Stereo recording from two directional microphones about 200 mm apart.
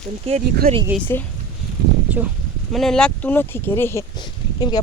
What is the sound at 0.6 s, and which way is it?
Speech, 45° right (ahead or behind).